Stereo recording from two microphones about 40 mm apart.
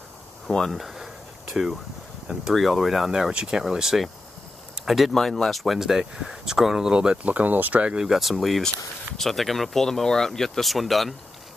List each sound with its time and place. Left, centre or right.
0.7 s speech: centre
2.5 s speech: centre
3.1 s speech: centre
5.1 s speech: centre
6.9 s speech: right
7.2 s speech: right
8.0 s speech: centre